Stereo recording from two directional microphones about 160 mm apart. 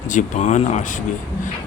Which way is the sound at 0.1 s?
50° left (ahead or behind).